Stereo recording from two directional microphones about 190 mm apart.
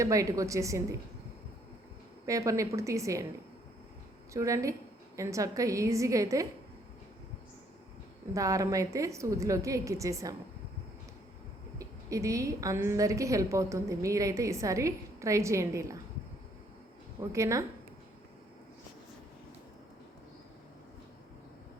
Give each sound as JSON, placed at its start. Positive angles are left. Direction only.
{"t": 0.0, "sound": "a woman's voice", "side_deg": -15}
{"t": 2.2, "sound": "a woman's voice", "side_deg": -15}
{"t": 4.4, "sound": "a woman's voice", "side_deg": -15}
{"t": 8.3, "sound": "a woman's voice", "side_deg": -15}
{"t": 11.8, "sound": "a woman's voice", "side_deg": -15}
{"t": 17.3, "sound": "a woman's voice", "side_deg": -15}